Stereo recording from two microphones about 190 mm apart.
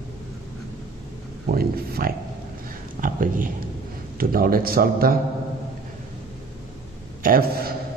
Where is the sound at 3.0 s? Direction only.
45° right (ahead or behind).